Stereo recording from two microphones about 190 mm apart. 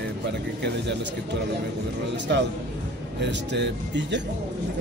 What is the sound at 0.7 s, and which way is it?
Speech, 65° right (ahead or behind).